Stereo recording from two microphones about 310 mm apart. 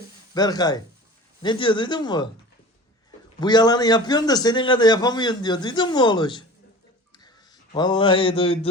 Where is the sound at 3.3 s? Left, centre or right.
Centre.